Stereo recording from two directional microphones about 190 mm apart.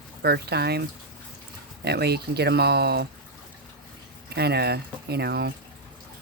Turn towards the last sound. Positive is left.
turn(degrees=-55)  # may be behind; listen again after turning